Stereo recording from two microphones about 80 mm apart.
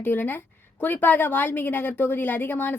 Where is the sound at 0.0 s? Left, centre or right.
Left.